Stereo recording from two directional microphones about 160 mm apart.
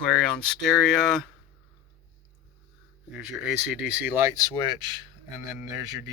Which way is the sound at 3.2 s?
5° right (ahead or behind).